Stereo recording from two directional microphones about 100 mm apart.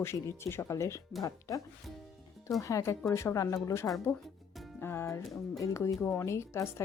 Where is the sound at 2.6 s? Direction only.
30° left (ahead or behind).